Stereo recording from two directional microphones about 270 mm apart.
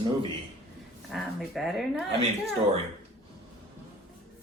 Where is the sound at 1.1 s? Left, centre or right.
Centre.